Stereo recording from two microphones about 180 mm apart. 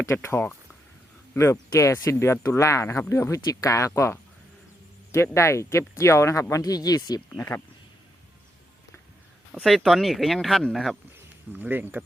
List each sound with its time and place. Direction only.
0.0 s speech: 15° left (ahead or behind)
9.5 s speech: centre (ahead or behind)
11.5 s speech: 10° right (ahead or behind)